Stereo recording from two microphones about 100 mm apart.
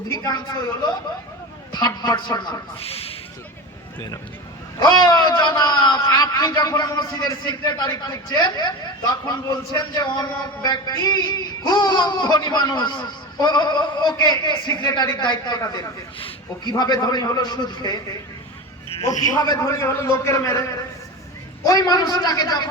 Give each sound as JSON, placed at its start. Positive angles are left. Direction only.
{"t": 0.1, "sound": "a man's voice", "side_deg": 40}
{"t": 1.7, "sound": "a man's voice", "side_deg": 45}
{"t": 2.8, "sound": "speech", "side_deg": 75}
{"t": 4.8, "sound": "a man's voice", "side_deg": 45}
{"t": 19.0, "sound": "a man's voice", "side_deg": 35}